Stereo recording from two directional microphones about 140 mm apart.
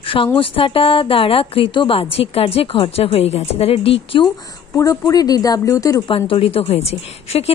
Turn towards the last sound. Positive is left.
turn(degrees=45)  # may be behind; listen again after turning